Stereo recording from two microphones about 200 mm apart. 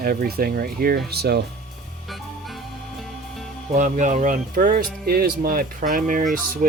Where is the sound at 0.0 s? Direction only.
50° right (ahead or behind).